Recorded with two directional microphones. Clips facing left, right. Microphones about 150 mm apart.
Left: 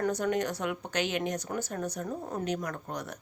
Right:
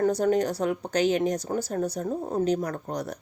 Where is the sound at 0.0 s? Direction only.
35° right (ahead or behind).